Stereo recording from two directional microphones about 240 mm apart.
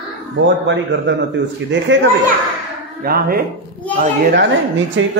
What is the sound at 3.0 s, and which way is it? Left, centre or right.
Speech, right.